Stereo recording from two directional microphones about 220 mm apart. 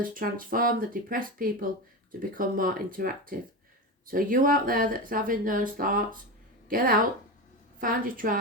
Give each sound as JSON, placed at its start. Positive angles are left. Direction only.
{"t": 0.0, "sound": "speech", "side_deg": -40}